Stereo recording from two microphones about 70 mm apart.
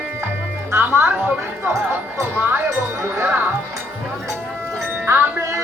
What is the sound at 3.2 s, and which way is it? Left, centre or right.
Music, right.